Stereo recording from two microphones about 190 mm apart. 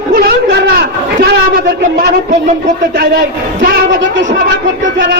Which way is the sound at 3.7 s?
65° right (ahead or behind).